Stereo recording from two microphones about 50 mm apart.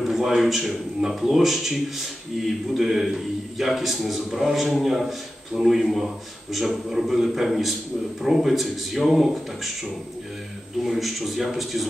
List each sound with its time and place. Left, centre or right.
0.0 s a man's voice: centre
10.8 s a man's voice: centre